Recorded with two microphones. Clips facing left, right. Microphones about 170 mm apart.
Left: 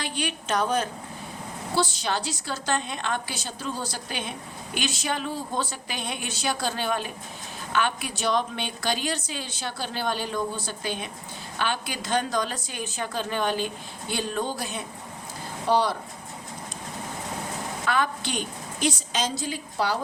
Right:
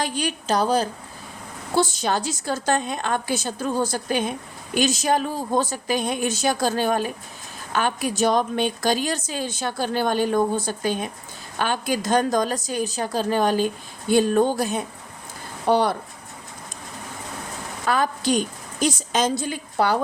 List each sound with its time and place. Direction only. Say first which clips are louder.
0.0 s a woman's voice: right 5 dB; 40° right (ahead or behind)
1.7 s speech: right 5 dB; 45° right (ahead or behind)
15.6 s speech: right 4 dB; 55° right (ahead or behind)
17.8 s a woman's voice: right 5 dB; 40° right (ahead or behind); by 20.0 s 55° right (ahead or behind)